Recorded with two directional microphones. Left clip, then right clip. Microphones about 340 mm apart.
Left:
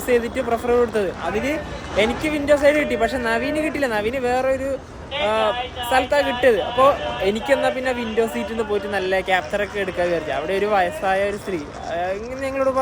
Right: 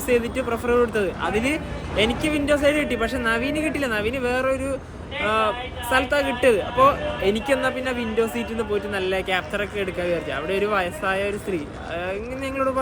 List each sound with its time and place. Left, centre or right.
0.1 s a man's voice: centre